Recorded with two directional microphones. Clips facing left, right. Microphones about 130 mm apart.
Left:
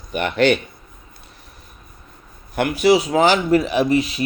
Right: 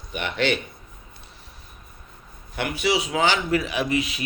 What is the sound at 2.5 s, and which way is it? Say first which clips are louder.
Speech: left 8 dB; 45° left (ahead or behind).